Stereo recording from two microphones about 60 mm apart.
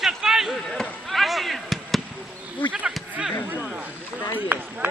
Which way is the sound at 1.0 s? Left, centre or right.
Centre.